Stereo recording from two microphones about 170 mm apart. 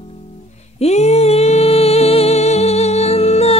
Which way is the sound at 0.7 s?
40° left (ahead or behind).